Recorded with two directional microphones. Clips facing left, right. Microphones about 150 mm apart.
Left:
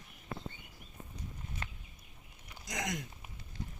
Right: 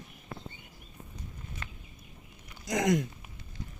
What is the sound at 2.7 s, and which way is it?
Speech, 60° right (ahead or behind).